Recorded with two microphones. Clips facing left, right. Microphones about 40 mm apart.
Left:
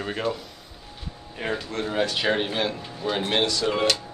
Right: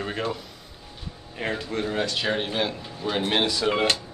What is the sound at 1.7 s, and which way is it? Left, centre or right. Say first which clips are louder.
Speech: right 1 dB; centre.